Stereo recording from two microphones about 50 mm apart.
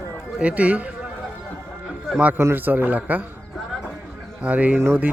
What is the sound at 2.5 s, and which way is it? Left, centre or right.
Speech, right.